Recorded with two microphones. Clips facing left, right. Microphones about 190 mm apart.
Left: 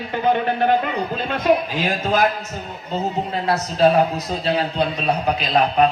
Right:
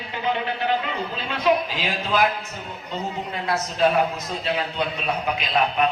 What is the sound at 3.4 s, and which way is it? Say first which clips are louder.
A man's voice: left 4 dB; 35° left (ahead or behind).